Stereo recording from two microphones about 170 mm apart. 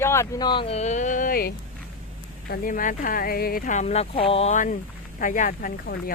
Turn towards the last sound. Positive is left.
turn(degrees=60)  # may be behind; listen again after turning